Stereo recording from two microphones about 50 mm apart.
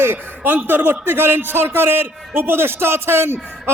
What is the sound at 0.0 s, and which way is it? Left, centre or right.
Speech, right.